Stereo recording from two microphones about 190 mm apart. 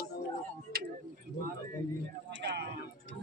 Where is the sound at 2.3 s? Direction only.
65° right (ahead or behind).